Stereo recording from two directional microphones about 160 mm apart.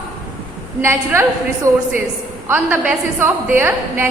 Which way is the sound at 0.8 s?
15° right (ahead or behind).